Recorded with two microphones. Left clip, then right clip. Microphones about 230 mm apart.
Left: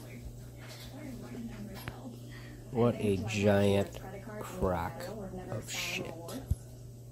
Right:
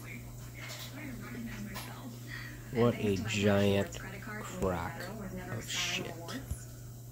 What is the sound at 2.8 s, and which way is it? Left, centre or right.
Speech, centre.